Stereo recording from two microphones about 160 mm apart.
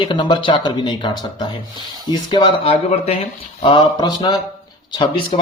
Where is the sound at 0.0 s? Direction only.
30° left (ahead or behind).